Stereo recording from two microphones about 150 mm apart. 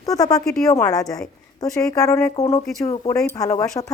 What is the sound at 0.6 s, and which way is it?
Speech, 20° left (ahead or behind).